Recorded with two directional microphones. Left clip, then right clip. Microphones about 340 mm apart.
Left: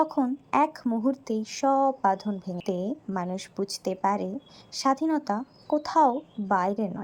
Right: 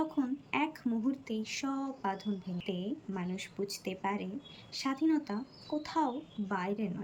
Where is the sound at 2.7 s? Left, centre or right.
Left.